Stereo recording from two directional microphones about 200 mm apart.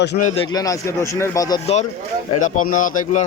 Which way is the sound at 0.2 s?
35° left (ahead or behind).